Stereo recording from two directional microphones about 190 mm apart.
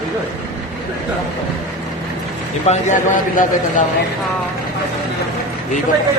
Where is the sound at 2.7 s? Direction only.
40° left (ahead or behind).